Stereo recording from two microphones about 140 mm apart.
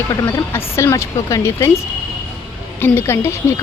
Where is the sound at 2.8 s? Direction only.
15° left (ahead or behind).